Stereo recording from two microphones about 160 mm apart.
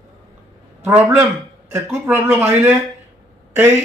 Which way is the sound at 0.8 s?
10° right (ahead or behind).